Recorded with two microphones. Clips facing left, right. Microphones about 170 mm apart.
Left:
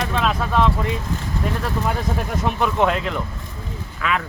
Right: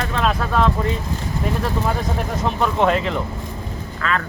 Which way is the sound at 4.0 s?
10° left (ahead or behind).